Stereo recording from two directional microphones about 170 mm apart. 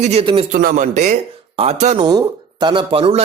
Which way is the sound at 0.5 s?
50° right (ahead or behind).